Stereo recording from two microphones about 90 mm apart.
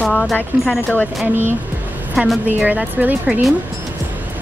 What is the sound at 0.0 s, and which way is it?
Speech, 5° left (ahead or behind).